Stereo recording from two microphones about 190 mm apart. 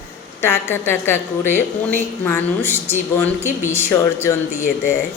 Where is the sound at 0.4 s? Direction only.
10° left (ahead or behind).